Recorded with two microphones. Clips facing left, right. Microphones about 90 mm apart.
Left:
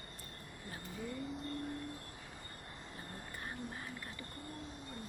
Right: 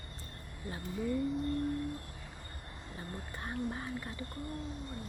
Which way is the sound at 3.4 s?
25° right (ahead or behind).